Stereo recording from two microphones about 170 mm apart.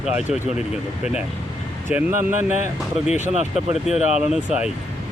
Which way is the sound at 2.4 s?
45° left (ahead or behind).